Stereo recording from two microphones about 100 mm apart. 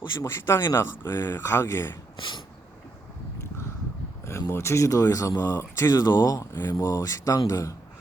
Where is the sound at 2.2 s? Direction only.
55° left (ahead or behind).